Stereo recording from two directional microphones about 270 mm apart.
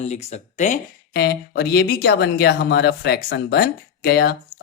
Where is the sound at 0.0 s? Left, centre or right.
Left.